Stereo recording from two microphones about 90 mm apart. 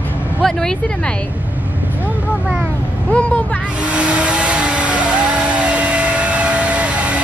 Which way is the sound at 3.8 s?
10° right (ahead or behind).